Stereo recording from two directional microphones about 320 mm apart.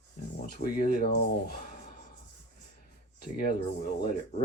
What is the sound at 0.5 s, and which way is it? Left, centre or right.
Speech, left.